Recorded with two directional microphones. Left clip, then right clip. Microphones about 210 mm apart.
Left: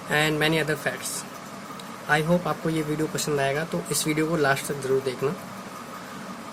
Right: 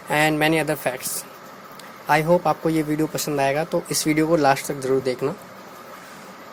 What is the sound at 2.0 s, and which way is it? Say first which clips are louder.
Speech: right 5 dB; 25° right (ahead or behind).